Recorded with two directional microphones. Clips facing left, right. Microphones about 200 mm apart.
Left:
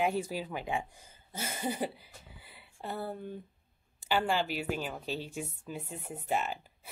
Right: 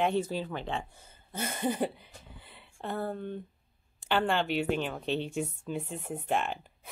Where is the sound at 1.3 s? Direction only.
60° right (ahead or behind).